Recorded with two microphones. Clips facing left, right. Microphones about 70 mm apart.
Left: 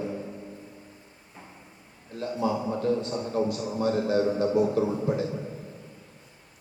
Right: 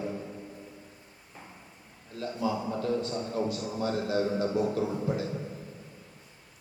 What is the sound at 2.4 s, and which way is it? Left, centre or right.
A man's voice, left.